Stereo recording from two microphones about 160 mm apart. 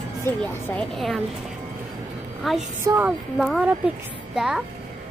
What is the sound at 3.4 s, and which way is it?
A child's voice, 5° right (ahead or behind).